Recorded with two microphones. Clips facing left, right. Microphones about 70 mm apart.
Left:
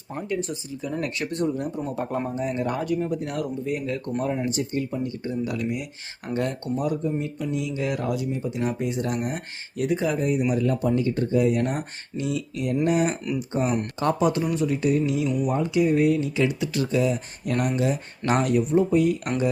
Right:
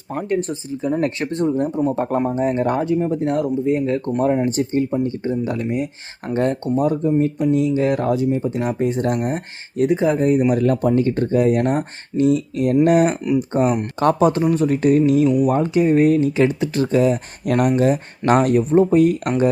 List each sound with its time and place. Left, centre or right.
0.1 s speech: right
2.8 s speech: right
9.2 s speech: right
10.5 s speech: right
12.8 s speech: right
13.5 s speech: right